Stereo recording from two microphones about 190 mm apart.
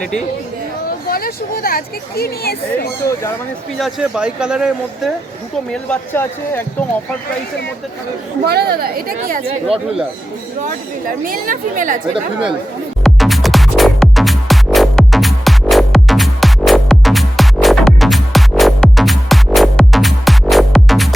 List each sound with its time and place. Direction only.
1.0 s speech: 50° left (ahead or behind)
3.8 s speech: centre (ahead or behind)
5.7 s speech: 10° left (ahead or behind)
8.4 s a woman's voice: 55° right (ahead or behind)
11.3 s a woman's voice: 45° right (ahead or behind)
12.1 s speech: 5° right (ahead or behind)
13.0 s music: centre (ahead or behind)